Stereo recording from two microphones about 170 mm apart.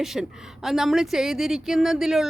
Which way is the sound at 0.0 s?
Centre (ahead or behind).